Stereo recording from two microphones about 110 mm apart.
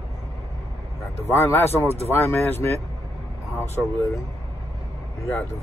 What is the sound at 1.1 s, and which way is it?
Speech, 20° left (ahead or behind).